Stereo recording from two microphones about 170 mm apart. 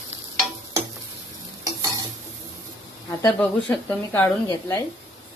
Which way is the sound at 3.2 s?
10° left (ahead or behind).